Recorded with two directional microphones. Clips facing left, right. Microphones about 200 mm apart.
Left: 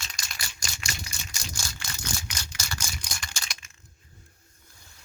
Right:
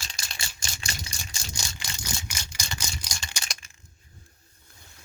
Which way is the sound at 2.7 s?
10° right (ahead or behind).